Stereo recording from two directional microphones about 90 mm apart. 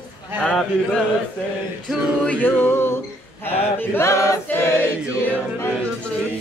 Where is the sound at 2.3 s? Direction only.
20° left (ahead or behind); by 4.4 s 35° left (ahead or behind).